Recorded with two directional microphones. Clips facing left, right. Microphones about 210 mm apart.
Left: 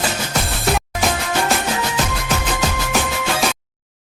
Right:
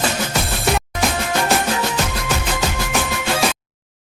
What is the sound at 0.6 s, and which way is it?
Music, centre (ahead or behind).